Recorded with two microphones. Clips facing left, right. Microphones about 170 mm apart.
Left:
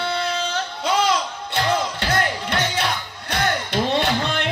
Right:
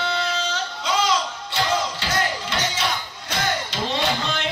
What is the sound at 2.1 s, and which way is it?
Music, 60° left (ahead or behind).